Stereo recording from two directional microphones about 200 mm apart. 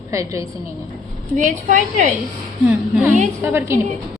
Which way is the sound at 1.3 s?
40° right (ahead or behind).